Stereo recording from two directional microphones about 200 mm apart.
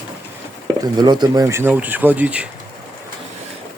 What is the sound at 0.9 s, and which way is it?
Speech, 20° right (ahead or behind).